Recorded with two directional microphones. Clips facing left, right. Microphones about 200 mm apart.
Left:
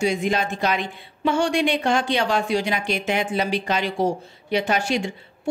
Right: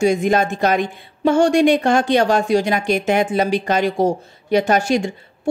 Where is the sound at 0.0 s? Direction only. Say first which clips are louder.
Right 6 dB; 45° right (ahead or behind).